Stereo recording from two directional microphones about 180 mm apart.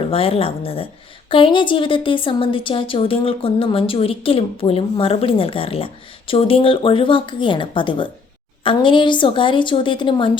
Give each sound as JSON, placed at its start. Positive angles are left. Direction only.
{"t": 0.1, "sound": "a woman's voice", "side_deg": 30}